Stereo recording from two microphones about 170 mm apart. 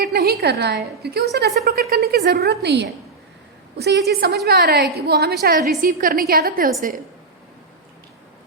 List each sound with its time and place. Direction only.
0.0 s a woman's voice: 70° right (ahead or behind)
4.1 s a woman's voice: 65° right (ahead or behind)
5.5 s a woman's voice: 55° right (ahead or behind)